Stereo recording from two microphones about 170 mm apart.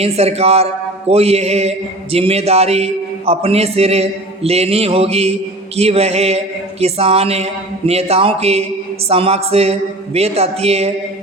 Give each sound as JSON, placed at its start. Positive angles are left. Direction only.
{"t": 0.0, "sound": "a man's voice", "side_deg": -35}